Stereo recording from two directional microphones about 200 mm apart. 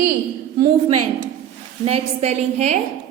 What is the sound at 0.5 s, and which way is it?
A woman's voice, 40° right (ahead or behind).